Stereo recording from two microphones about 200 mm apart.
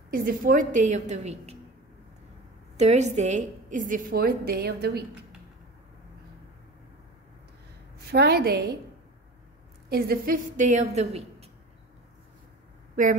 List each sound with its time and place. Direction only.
0.1 s a woman's voice: 45° right (ahead or behind)
2.8 s a woman's voice: 35° right (ahead or behind); by 5.0 s 50° right (ahead or behind)
8.1 s a woman's voice: 50° right (ahead or behind)
9.8 s a woman's voice: 50° right (ahead or behind); by 11.4 s 30° right (ahead or behind)